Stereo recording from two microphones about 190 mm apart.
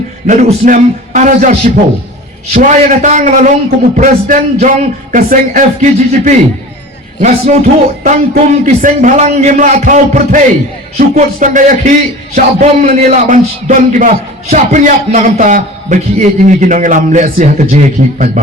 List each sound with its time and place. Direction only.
0.3 s a man's voice: 40° right (ahead or behind)